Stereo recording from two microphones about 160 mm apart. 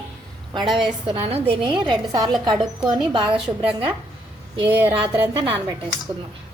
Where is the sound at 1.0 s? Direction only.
35° right (ahead or behind).